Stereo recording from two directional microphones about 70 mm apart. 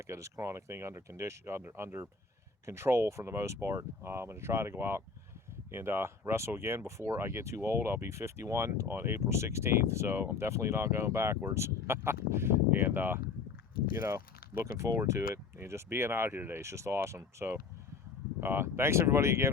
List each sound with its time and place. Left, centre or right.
0.0 s speech: right
14.0 s speech: right